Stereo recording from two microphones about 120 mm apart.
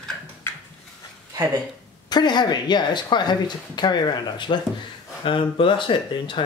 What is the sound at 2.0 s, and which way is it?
Speech, 35° left (ahead or behind).